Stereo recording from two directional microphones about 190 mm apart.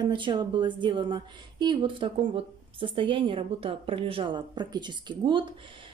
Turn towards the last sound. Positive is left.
turn(degrees=-25)  # may be behind; listen again after turning